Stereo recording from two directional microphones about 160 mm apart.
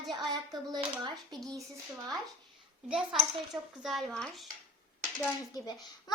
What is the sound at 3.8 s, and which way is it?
Speech, centre (ahead or behind).